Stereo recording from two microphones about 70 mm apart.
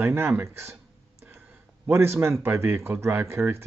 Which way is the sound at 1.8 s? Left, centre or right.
Right.